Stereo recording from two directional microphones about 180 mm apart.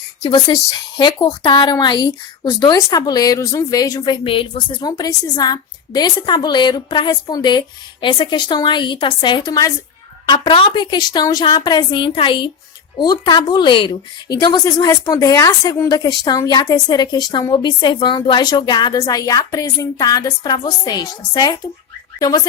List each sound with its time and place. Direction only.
0.2 s a woman's voice: 25° left (ahead or behind)